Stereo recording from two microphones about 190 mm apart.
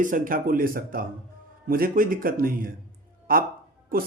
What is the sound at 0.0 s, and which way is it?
Speech, 45° right (ahead or behind).